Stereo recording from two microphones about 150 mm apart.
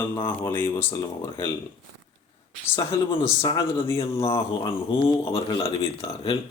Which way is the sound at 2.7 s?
30° left (ahead or behind).